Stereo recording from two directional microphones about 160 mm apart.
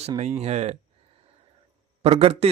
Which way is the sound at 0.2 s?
45° right (ahead or behind).